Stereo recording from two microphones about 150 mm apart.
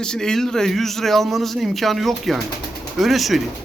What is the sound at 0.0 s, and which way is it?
Speech, 5° left (ahead or behind).